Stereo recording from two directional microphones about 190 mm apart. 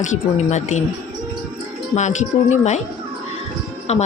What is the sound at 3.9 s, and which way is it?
Speech, 35° left (ahead or behind).